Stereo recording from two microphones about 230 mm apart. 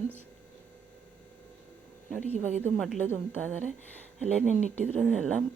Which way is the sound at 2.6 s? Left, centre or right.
Centre.